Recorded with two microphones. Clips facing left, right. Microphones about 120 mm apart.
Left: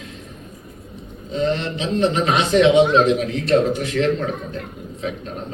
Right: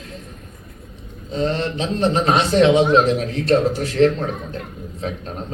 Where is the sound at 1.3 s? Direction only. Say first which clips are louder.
Even; 35° right (ahead or behind).